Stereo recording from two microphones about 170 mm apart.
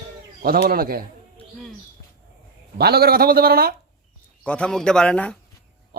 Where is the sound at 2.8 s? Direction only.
65° right (ahead or behind).